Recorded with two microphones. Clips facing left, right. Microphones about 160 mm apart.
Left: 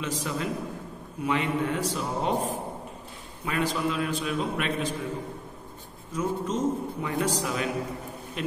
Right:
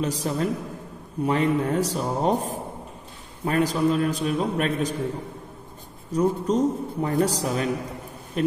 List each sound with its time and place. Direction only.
0.0 s a man's voice: 40° right (ahead or behind)
6.1 s a man's voice: 40° right (ahead or behind)